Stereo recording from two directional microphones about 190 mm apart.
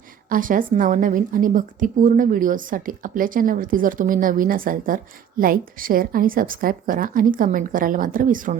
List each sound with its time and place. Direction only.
0.3 s a woman's voice: 45° right (ahead or behind)